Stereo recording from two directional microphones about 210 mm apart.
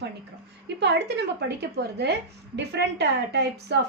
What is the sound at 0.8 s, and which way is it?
A woman's voice, 55° right (ahead or behind).